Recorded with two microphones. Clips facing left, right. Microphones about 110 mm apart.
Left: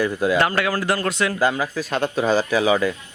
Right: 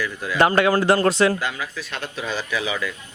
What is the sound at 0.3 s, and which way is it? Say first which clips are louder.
Speech: right 3 dB; 25° right (ahead or behind).